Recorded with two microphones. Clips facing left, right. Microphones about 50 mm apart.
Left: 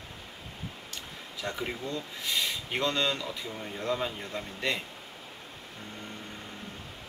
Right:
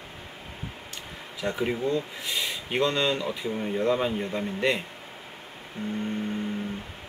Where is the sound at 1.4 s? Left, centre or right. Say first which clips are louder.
Right 7 dB; right.